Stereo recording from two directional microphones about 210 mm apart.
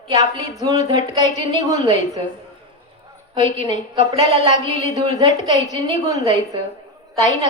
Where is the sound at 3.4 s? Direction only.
35° left (ahead or behind).